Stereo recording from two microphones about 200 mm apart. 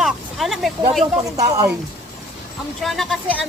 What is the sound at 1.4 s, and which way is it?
Speech, 15° right (ahead or behind).